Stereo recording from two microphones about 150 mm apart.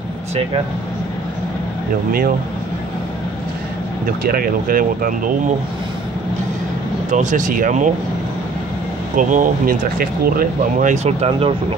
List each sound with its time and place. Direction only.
4.2 s speech: 75° right (ahead or behind)
7.1 s speech: 55° right (ahead or behind)
9.1 s speech: 60° right (ahead or behind); by 11.5 s 40° right (ahead or behind)